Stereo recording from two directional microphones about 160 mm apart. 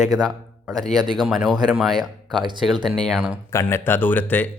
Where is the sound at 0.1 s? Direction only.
Centre (ahead or behind).